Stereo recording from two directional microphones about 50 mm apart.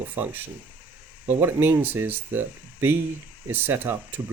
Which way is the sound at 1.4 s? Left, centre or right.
Right.